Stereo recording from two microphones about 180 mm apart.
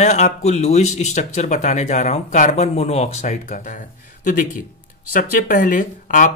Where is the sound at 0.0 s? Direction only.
40° left (ahead or behind).